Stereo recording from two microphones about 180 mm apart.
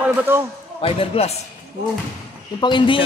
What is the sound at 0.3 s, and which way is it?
Speech, 10° right (ahead or behind).